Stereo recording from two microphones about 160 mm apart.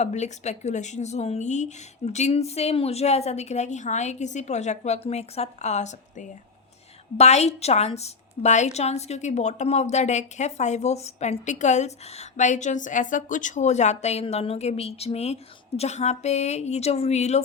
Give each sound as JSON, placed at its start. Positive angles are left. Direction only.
{"t": 0.0, "sound": "a woman's voice", "side_deg": 45}